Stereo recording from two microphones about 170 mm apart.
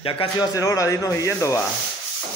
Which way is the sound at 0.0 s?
30° left (ahead or behind).